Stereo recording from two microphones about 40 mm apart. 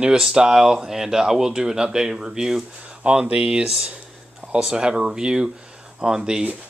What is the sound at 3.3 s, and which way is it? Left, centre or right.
Speech, right.